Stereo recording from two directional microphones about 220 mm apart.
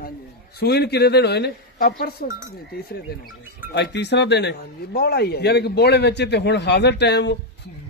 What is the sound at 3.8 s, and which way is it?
Speech, 50° left (ahead or behind).